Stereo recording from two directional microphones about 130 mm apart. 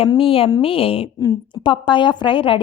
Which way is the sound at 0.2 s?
45° left (ahead or behind).